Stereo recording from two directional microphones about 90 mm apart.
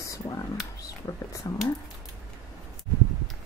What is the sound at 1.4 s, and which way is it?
Speech, 50° left (ahead or behind).